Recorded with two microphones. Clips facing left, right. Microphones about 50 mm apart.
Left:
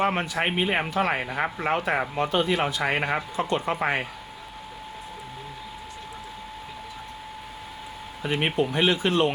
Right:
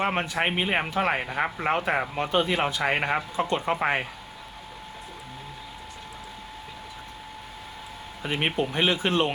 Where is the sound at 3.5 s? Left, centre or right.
Centre.